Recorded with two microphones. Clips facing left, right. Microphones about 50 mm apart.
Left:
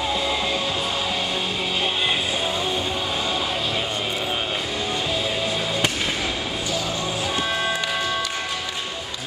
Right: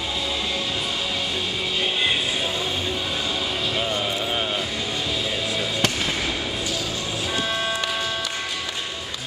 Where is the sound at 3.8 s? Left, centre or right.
Centre.